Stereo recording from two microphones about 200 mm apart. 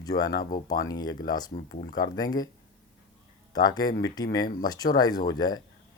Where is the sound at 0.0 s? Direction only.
20° left (ahead or behind).